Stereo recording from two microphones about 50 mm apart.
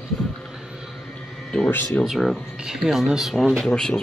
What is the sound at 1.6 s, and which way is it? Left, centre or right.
Speech, left.